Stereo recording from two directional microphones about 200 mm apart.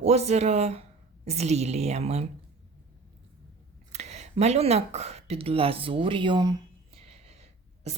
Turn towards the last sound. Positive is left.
turn(degrees=-30)  # may be behind; listen again after turning